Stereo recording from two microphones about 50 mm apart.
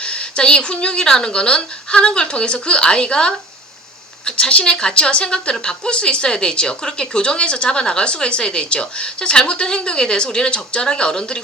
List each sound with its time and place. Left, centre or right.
0.0 s speech: centre